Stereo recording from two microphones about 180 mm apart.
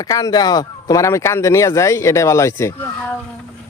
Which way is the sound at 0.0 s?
20° left (ahead or behind).